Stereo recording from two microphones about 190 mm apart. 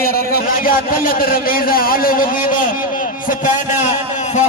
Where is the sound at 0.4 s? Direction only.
50° left (ahead or behind).